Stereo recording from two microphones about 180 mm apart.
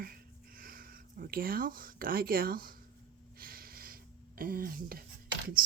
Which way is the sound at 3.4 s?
55° right (ahead or behind).